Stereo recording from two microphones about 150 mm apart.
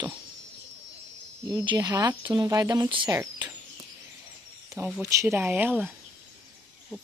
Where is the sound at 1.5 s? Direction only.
30° right (ahead or behind).